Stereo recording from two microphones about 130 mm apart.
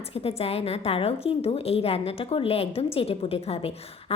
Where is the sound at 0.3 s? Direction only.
50° left (ahead or behind).